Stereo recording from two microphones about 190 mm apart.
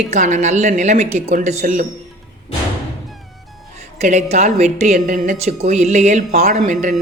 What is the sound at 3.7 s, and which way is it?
A woman's voice, 35° right (ahead or behind).